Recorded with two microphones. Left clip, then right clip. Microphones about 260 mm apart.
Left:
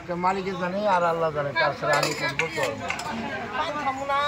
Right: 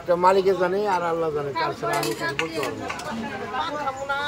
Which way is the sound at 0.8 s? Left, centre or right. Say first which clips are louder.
Left 1 dB; centre.